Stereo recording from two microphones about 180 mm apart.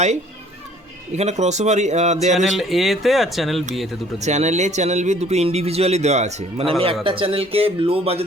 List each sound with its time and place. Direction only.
1.1 s speech: 40° right (ahead or behind)
2.3 s speech: centre (ahead or behind)
4.2 s speech: 40° right (ahead or behind)